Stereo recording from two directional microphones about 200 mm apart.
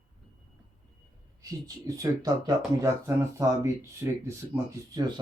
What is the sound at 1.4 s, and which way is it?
Speech, 15° right (ahead or behind).